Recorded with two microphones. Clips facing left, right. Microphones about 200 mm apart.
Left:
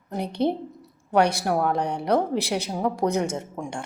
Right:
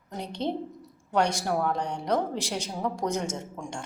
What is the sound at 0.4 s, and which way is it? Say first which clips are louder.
A woman's voice: left 6 dB; 60° left (ahead or behind).